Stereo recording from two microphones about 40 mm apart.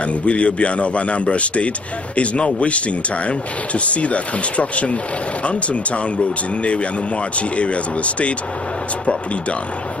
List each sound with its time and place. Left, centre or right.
0.0 s speech: left